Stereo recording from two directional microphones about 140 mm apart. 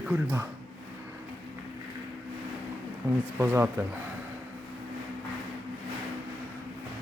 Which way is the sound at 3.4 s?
15° right (ahead or behind).